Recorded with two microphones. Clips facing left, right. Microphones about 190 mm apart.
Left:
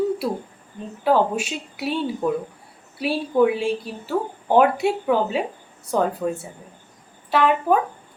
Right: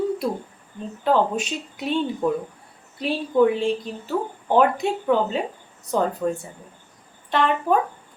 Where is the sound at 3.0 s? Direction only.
10° left (ahead or behind).